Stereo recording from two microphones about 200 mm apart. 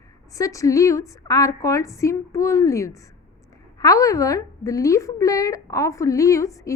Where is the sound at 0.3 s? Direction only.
15° left (ahead or behind).